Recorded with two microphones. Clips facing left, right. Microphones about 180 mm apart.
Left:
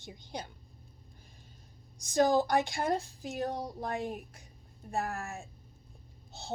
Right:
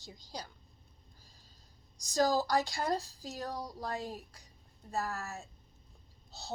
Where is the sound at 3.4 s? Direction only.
25° left (ahead or behind).